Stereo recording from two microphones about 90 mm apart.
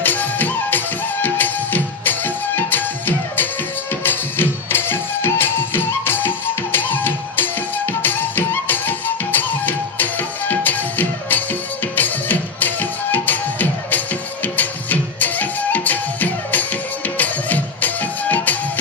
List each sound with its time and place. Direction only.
0.0 s music: 20° left (ahead or behind)